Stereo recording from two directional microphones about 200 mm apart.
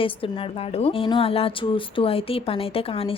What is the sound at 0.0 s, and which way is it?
A woman's voice, 25° left (ahead or behind).